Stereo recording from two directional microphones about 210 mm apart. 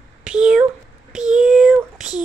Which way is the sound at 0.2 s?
5° right (ahead or behind).